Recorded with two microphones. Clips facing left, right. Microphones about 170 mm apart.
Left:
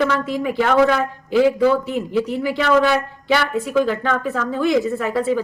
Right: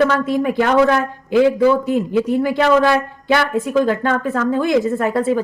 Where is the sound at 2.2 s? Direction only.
50° right (ahead or behind).